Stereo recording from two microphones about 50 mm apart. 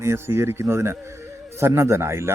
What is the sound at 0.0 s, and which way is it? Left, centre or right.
Speech, right.